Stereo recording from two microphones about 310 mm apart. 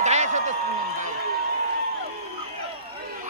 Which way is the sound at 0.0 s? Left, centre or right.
Right.